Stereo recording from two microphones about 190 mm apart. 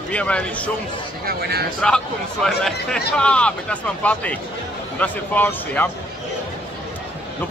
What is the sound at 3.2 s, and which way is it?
A man's voice, 5° left (ahead or behind).